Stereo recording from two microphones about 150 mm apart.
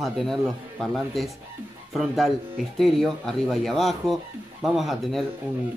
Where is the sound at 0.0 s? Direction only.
Centre (ahead or behind).